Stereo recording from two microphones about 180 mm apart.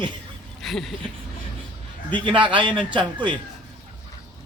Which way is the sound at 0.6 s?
Centre (ahead or behind).